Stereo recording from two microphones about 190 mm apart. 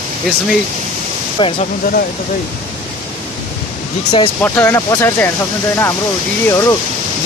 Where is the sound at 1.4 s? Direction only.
25° left (ahead or behind).